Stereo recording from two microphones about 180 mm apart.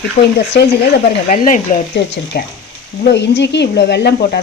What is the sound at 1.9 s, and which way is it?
Speech, 70° left (ahead or behind).